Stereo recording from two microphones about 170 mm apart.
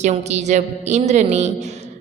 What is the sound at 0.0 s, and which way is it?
A woman's voice, 40° right (ahead or behind).